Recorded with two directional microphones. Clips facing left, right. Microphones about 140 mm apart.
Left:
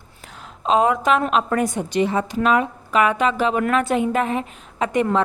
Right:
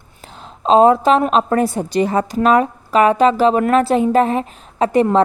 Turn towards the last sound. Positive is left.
turn(degrees=-35)  # may be behind; listen again after turning